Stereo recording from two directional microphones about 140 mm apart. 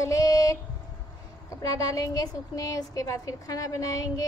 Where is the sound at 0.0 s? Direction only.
25° left (ahead or behind).